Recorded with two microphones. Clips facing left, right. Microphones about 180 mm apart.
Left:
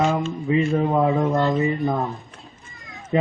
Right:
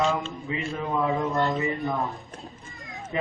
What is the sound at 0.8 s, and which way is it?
Speech, 40° left (ahead or behind).